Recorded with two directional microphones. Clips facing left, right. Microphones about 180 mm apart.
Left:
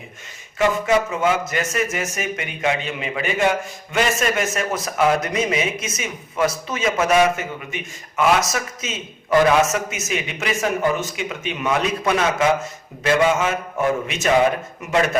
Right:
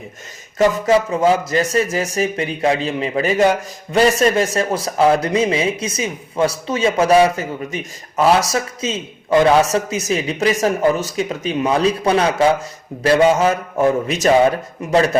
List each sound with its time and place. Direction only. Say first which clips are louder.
0.6 s a man's voice: right 4 dB; 35° right (ahead or behind)